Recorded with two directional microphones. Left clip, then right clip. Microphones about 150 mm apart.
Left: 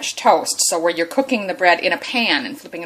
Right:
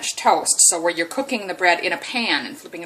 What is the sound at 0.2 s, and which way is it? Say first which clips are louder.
Speech: left 2 dB; 40° left (ahead or behind).